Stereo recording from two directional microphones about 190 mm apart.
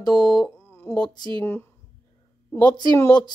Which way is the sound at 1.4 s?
10° left (ahead or behind).